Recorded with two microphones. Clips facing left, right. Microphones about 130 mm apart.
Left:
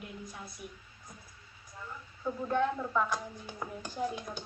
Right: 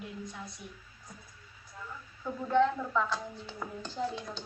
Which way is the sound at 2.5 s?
15° left (ahead or behind).